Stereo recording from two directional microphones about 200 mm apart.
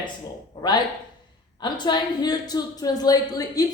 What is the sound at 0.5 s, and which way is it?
Speech, 20° left (ahead or behind).